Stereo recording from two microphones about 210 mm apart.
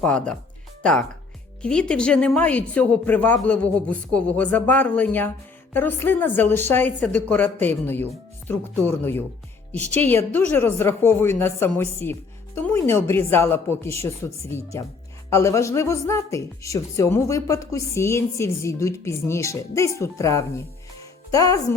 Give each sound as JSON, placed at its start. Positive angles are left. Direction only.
{"t": 0.0, "sound": "a man's voice", "side_deg": 5}